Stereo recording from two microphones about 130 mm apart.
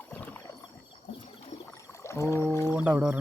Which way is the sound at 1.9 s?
20° left (ahead or behind).